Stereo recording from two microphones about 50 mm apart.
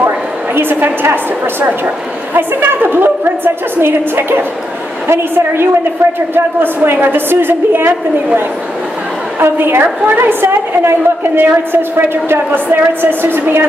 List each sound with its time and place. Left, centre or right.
0.6 s a woman's voice: right
2.3 s a woman's voice: right
9.4 s a woman's voice: right